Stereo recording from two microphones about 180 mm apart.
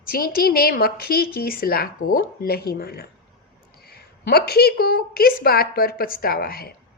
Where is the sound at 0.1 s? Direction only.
55° left (ahead or behind).